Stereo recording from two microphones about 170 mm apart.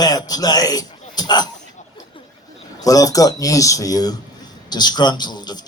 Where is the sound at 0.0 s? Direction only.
20° left (ahead or behind).